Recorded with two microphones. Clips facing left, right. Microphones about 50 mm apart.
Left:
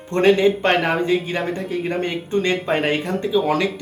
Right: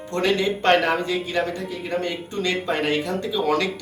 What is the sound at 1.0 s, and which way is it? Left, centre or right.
Speech, left.